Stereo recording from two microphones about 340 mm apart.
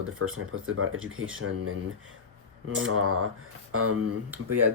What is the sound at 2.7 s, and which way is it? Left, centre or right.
Speech, right.